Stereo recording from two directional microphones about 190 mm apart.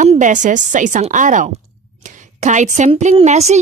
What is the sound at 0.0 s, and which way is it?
A woman's voice, 40° right (ahead or behind).